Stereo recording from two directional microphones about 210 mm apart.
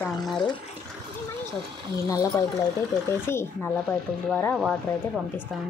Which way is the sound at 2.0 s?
15° left (ahead or behind).